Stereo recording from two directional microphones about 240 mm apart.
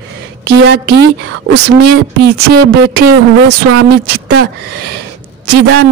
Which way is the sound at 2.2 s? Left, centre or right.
Right.